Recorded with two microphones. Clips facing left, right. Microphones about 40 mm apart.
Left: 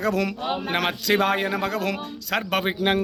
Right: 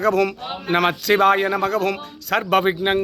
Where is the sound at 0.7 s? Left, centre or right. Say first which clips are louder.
Right 7 dB; centre.